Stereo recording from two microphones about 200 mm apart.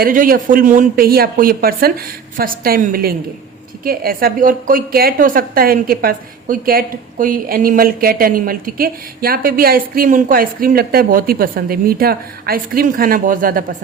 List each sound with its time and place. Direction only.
0.0 s a woman's voice: 45° right (ahead or behind)